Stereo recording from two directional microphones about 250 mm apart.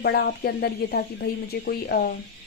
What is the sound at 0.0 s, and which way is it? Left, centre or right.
Speech, left.